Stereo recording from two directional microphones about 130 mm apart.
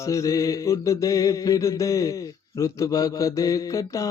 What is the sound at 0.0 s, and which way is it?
Mantra, 25° left (ahead or behind).